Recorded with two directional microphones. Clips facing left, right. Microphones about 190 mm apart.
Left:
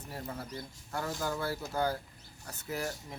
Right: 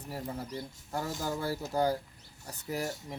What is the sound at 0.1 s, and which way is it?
Speech, 15° right (ahead or behind).